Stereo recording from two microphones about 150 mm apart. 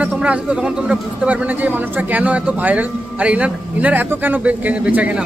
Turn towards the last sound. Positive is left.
turn(degrees=-10)  # may be behind; listen again after turning